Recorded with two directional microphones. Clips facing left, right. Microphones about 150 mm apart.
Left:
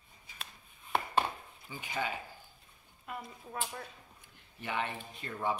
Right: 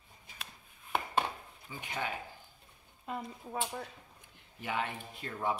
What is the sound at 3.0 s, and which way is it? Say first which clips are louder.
Speech: right 4 dB; 25° right (ahead or behind).